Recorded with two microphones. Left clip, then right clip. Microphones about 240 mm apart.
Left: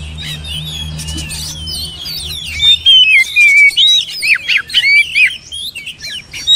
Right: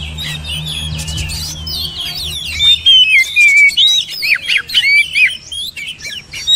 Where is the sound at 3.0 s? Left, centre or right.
Centre.